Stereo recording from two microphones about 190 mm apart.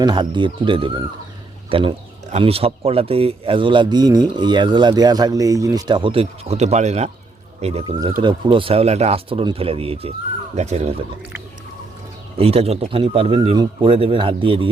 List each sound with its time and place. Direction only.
0.0 s speech: 25° right (ahead or behind)
12.4 s speech: 30° right (ahead or behind)